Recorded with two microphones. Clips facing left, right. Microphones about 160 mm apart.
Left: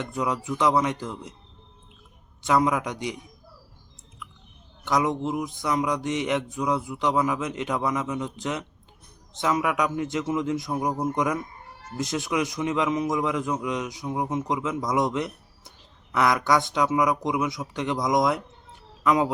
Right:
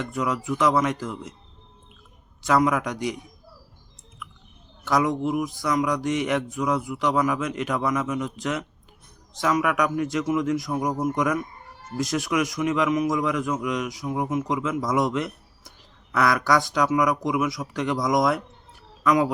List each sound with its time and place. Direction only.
0.0 s a man's voice: 20° left (ahead or behind)
2.4 s a man's voice: 20° left (ahead or behind)
4.9 s a man's voice: 20° left (ahead or behind)